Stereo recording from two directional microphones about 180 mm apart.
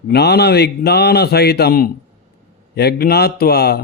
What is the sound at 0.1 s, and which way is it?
Speech, 65° left (ahead or behind).